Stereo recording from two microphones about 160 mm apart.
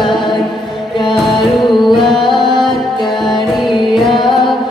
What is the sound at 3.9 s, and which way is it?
Music, centre (ahead or behind).